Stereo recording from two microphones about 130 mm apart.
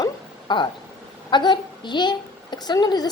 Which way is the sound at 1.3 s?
35° left (ahead or behind).